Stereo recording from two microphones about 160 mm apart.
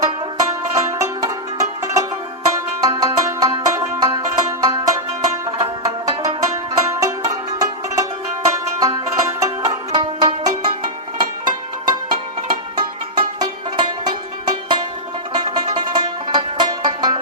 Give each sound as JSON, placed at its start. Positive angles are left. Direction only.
{"t": 0.3, "sound": "music", "side_deg": -20}